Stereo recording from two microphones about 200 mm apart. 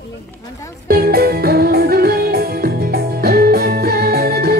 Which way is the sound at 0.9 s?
50° right (ahead or behind).